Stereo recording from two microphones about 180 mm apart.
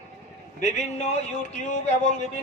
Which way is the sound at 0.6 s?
40° left (ahead or behind).